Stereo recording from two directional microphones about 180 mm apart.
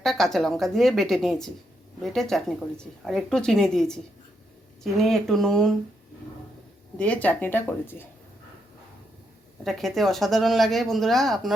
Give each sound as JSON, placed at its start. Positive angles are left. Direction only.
{"t": 0.0, "sound": "speech", "side_deg": 0}
{"t": 7.0, "sound": "speech", "side_deg": 10}
{"t": 9.6, "sound": "speech", "side_deg": 0}